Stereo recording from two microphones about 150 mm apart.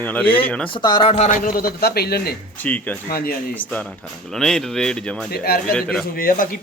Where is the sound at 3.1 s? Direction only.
85° left.